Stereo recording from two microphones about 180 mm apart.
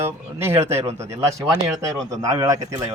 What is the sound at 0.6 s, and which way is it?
Speech, 35° right (ahead or behind).